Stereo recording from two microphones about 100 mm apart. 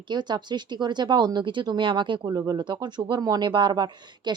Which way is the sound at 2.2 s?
40° right (ahead or behind).